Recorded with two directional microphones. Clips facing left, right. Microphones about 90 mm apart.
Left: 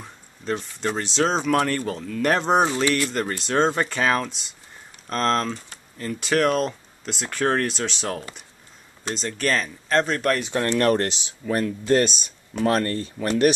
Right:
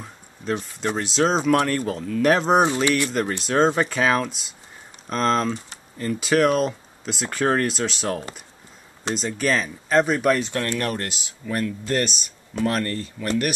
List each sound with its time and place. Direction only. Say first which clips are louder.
0.0 s speech: right 1 dB; centre (ahead or behind)
10.5 s speech: left 3 dB; 25° left (ahead or behind)
10.8 s speech: left 7 dB; 45° left (ahead or behind)
11.1 s speech: left 4 dB; 25° left (ahead or behind)